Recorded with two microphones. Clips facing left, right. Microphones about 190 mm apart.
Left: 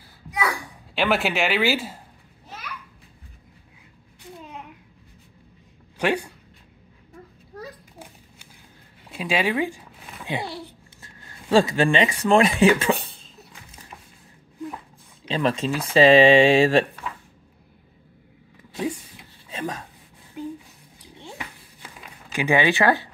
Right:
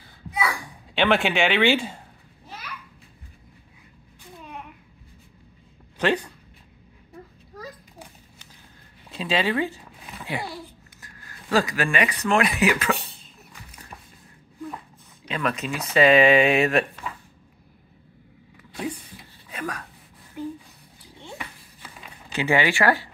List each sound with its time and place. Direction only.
0.9 s speech: 5° left (ahead or behind)
5.9 s speech: 10° left (ahead or behind)
9.1 s zipper: 10° left (ahead or behind)
11.0 s speech: 25° left (ahead or behind)
15.2 s speech: 25° left (ahead or behind)
18.7 s vehicle: 25° left (ahead or behind)
19.5 s a sound: 25° left (ahead or behind)
22.3 s speech: 15° left (ahead or behind)